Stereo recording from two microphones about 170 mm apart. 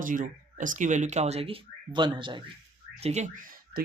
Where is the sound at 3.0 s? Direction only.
40° right (ahead or behind).